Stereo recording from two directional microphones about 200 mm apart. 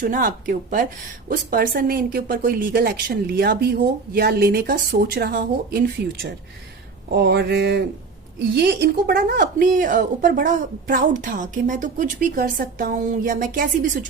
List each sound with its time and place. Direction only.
0.0 s speech: 40° right (ahead or behind)
7.1 s speech: 55° right (ahead or behind)